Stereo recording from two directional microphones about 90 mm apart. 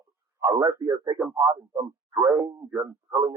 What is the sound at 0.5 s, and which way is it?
Speech, 35° right (ahead or behind).